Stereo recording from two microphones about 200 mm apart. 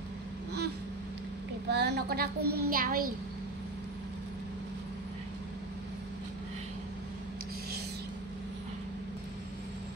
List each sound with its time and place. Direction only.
1.7 s speech: 55° right (ahead or behind)